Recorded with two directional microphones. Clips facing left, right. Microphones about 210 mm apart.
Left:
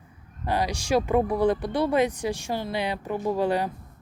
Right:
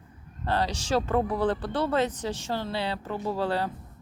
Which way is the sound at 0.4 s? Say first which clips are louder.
Left 1 dB; 10° left (ahead or behind).